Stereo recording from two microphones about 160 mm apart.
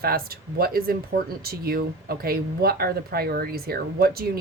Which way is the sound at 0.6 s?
70° right (ahead or behind).